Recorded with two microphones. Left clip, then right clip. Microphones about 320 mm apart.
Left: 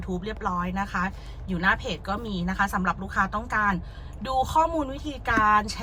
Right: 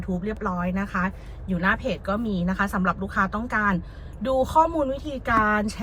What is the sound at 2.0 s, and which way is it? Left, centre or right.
Speech, centre.